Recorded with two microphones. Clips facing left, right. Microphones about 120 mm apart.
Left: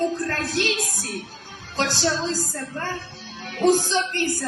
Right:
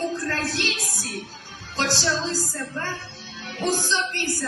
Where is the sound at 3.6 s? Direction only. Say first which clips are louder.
Left 6 dB; 50° left (ahead or behind).